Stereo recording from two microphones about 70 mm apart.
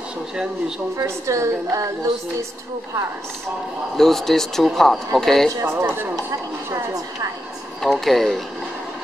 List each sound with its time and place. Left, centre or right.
0.9 s a woman's voice: right
3.9 s speech: centre
5.6 s a man's voice: right
7.8 s speech: centre